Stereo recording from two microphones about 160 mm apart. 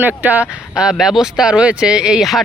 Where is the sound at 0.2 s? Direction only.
10° right (ahead or behind).